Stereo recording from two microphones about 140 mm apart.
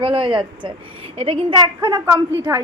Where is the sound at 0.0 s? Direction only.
40° right (ahead or behind).